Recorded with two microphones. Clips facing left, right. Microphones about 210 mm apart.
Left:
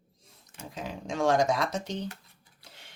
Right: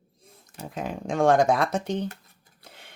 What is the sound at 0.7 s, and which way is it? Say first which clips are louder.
Speech: right 6 dB; 55° right (ahead or behind).